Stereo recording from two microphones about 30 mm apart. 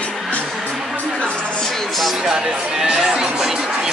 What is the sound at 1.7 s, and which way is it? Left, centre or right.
Music, centre.